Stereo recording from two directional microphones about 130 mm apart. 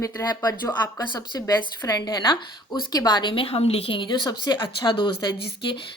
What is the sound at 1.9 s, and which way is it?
A woman's voice, 30° left (ahead or behind).